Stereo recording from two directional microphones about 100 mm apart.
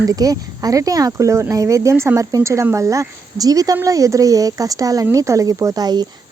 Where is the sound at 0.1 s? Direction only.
40° right (ahead or behind).